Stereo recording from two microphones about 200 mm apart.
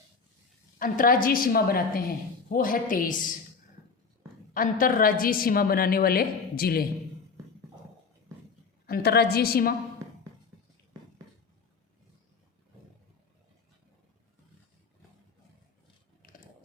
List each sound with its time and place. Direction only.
0.8 s a woman's voice: 45° left (ahead or behind)
4.5 s a woman's voice: 45° left (ahead or behind)
8.9 s a woman's voice: 55° left (ahead or behind)